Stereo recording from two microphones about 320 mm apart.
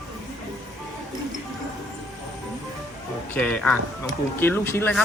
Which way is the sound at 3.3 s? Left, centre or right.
Centre.